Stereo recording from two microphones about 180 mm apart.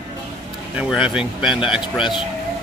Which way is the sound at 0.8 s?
5° right (ahead or behind).